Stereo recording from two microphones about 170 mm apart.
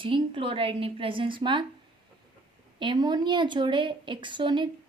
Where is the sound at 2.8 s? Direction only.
25° right (ahead or behind).